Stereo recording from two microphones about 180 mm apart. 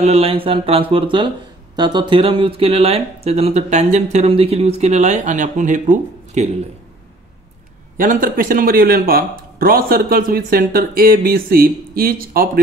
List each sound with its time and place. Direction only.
0.0 s speech: 35° right (ahead or behind)
8.0 s speech: 50° right (ahead or behind)